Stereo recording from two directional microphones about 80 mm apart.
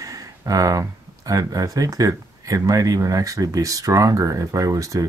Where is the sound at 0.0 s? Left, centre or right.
Right.